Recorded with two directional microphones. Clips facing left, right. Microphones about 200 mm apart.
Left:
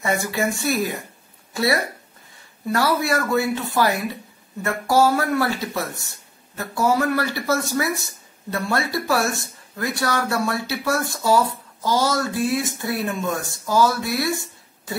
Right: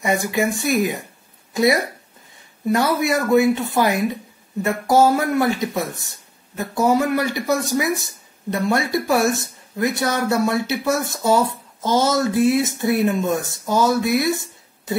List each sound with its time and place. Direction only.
0.0 s speech: 15° right (ahead or behind)